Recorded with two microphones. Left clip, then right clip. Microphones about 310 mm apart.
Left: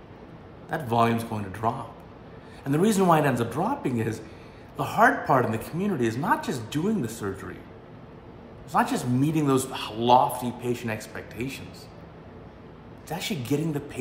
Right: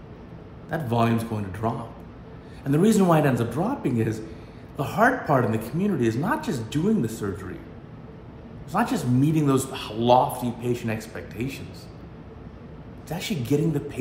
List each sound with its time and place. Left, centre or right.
0.7 s speech: centre
8.7 s speech: centre
13.1 s speech: centre